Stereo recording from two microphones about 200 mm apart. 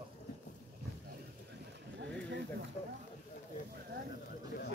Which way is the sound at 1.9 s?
60° right (ahead or behind).